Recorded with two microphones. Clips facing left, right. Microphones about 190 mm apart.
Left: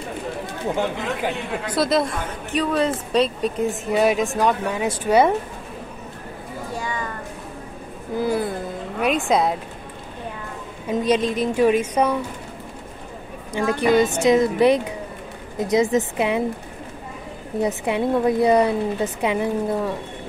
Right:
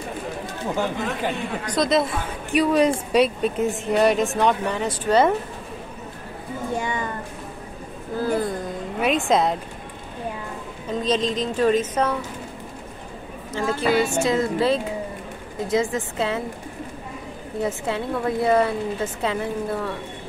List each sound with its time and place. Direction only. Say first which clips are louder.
1.2 s speech: left 1 dB; 5° left (ahead or behind)
6.8 s a sound: right 1 dB; 25° right (ahead or behind)
8.2 s speech: left 1 dB; 10° left (ahead or behind)
10.9 s speech: left 3 dB; 10° left (ahead or behind)
13.5 s a woman's voice: left 3 dB; 15° left (ahead or behind)
17.6 s speech: left 4 dB; 15° left (ahead or behind)